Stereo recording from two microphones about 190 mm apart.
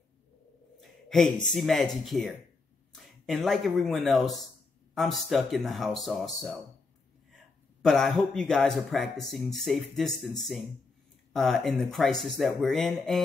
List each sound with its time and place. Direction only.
0.7 s speech: centre (ahead or behind)
7.8 s speech: centre (ahead or behind)
11.3 s speech: centre (ahead or behind)